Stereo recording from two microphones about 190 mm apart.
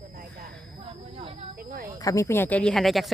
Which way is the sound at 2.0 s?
15° left (ahead or behind).